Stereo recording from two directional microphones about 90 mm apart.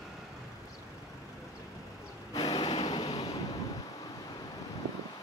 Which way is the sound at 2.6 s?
90° left.